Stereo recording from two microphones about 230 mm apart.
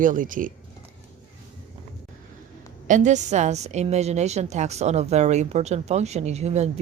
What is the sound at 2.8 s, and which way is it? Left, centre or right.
A woman's voice, right.